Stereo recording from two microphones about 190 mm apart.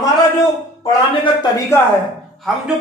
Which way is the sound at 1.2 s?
25° left (ahead or behind).